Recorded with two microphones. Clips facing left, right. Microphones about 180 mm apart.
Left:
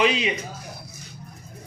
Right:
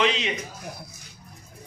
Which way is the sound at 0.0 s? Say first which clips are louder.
Left 2 dB; 10° left (ahead or behind).